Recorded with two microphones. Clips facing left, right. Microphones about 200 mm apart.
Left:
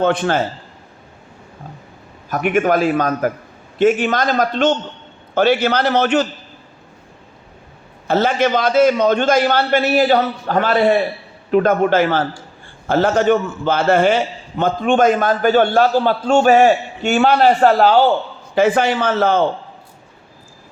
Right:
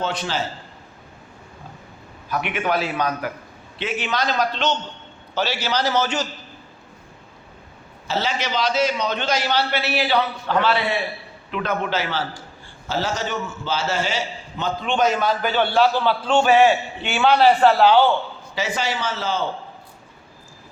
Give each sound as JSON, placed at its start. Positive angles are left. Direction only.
{"t": 0.0, "sound": "a man's voice", "side_deg": 55}
{"t": 2.3, "sound": "a man's voice", "side_deg": 45}
{"t": 8.0, "sound": "a man's voice", "side_deg": 55}